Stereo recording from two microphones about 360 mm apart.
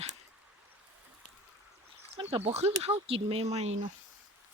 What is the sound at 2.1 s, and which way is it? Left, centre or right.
Speech, centre.